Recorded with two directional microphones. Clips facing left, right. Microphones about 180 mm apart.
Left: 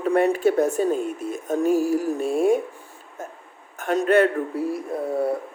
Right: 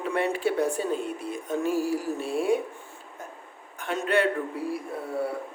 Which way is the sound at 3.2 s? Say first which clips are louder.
Left 6 dB; 45° left (ahead or behind).